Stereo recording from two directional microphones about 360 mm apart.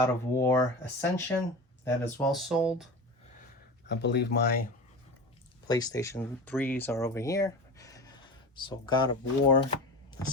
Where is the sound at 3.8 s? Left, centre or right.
Left.